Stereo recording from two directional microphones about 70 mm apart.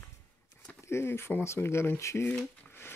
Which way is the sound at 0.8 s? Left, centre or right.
Left.